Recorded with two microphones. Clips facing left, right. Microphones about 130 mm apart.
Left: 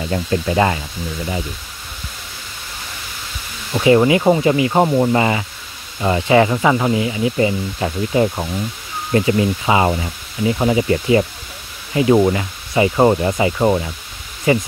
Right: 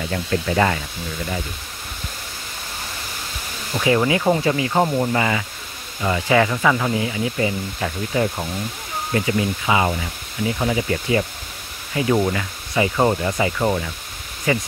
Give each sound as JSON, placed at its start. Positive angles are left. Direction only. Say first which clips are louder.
{"t": 0.1, "sound": "speech", "louder": "left 4 dB", "side_deg": 20}
{"t": 3.8, "sound": "speech", "louder": "left 6 dB", "side_deg": 25}